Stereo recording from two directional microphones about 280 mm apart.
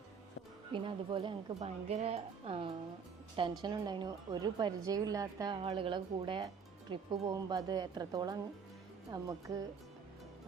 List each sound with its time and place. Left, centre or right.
0.7 s a woman's voice: centre